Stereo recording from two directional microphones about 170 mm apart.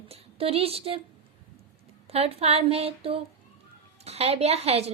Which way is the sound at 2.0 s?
35° right (ahead or behind).